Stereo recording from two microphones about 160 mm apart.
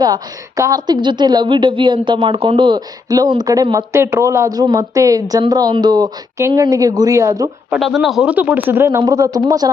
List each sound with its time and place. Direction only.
0.0 s a woman's voice: 20° right (ahead or behind)
7.7 s a man's voice: centre (ahead or behind); by 9.7 s 20° right (ahead or behind)